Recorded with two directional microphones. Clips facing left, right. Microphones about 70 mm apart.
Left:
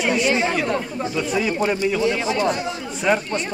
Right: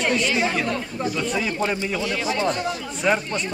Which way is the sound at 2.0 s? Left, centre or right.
Left.